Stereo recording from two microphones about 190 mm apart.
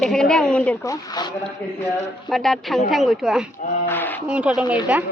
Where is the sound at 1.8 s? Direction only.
Centre (ahead or behind).